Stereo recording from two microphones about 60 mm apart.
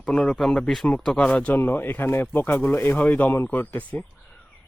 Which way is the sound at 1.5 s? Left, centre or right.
Left.